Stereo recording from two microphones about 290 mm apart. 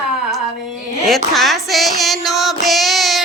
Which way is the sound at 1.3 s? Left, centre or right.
Centre.